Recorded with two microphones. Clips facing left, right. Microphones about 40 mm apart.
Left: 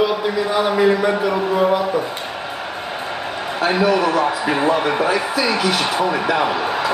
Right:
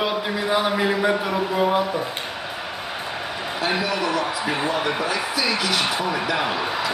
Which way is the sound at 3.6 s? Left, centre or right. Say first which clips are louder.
Left 7 dB; left.